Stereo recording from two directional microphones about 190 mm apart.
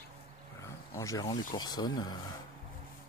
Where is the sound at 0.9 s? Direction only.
15° left (ahead or behind).